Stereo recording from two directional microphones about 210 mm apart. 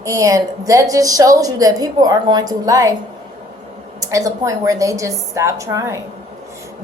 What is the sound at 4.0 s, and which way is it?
A woman's voice, 15° right (ahead or behind).